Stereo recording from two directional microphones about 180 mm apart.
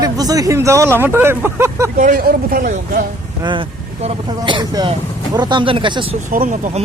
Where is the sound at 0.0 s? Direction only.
20° right (ahead or behind).